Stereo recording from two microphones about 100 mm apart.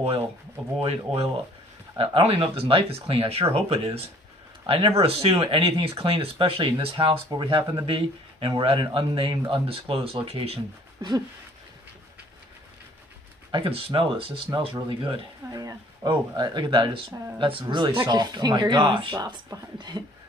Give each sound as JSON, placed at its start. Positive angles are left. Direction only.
{"t": 0.7, "sound": "speech", "side_deg": -85}
{"t": 2.0, "sound": "speech", "side_deg": -65}
{"t": 5.4, "sound": "a man's voice", "side_deg": -65}
{"t": 10.2, "sound": "speech", "side_deg": -85}
{"t": 11.0, "sound": "a sound", "side_deg": -45}
{"t": 13.5, "sound": "a man's voice", "side_deg": -65}
{"t": 15.5, "sound": "a man's voice", "side_deg": -40}
{"t": 19.1, "sound": "speech", "side_deg": -40}